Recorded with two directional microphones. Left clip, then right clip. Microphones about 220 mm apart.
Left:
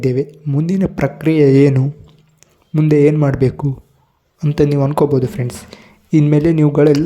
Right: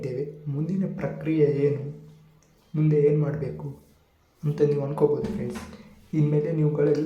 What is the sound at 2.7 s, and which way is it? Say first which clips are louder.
A man's voice: left 9 dB; 45° left (ahead or behind).